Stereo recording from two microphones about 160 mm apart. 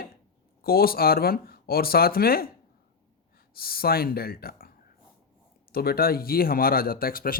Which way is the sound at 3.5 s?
70° left (ahead or behind).